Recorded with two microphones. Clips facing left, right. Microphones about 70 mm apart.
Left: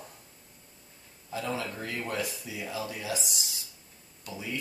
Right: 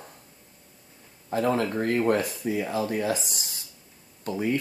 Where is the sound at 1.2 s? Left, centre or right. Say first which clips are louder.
Right 9 dB; right.